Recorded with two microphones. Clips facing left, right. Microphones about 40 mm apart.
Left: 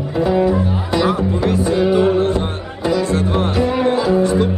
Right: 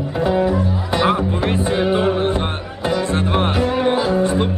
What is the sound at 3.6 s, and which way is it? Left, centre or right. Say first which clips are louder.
Music: left 2 dB; centre.